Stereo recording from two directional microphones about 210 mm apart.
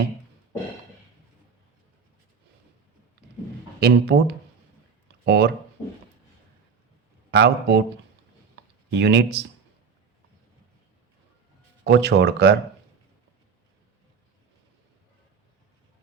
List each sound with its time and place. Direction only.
3.8 s speech: 50° right (ahead or behind)
7.3 s speech: 55° right (ahead or behind)
9.0 s speech: 55° right (ahead or behind)
11.9 s speech: 55° right (ahead or behind)